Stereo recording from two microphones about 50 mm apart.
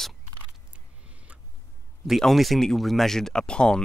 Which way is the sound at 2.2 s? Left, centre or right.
Centre.